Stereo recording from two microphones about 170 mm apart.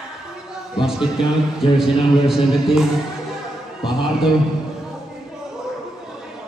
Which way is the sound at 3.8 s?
Centre (ahead or behind).